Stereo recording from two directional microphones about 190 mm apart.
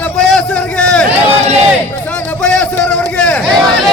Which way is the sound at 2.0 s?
10° left (ahead or behind).